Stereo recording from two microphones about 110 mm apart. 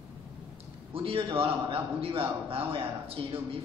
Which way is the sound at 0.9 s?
55° right (ahead or behind).